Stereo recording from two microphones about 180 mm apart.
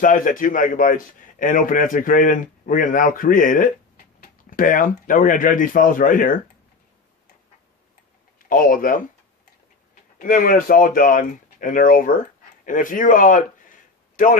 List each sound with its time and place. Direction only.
0.0 s a man's voice: 50° left (ahead or behind)
8.4 s speech: 50° left (ahead or behind)
10.2 s a man's voice: 50° left (ahead or behind)